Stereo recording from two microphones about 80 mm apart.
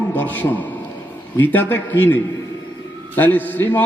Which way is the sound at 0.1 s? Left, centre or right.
Left.